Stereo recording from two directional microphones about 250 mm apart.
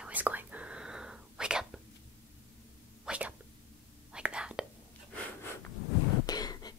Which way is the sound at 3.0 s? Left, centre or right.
Centre.